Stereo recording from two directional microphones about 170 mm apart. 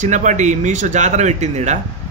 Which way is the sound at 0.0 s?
45° right (ahead or behind).